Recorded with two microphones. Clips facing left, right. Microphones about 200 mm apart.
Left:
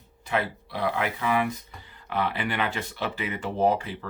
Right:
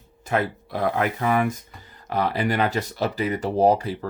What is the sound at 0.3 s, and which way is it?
Speech, 45° right (ahead or behind).